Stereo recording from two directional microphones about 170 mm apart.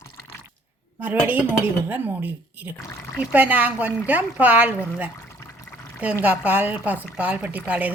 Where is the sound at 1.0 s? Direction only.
10° right (ahead or behind).